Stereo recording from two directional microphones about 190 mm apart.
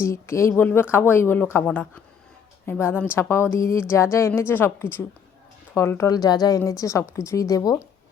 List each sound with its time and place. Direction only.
0.0 s a woman's voice: 15° left (ahead or behind)